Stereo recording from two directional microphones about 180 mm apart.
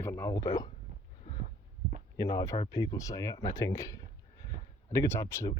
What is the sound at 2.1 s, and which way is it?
Speech, 20° left (ahead or behind).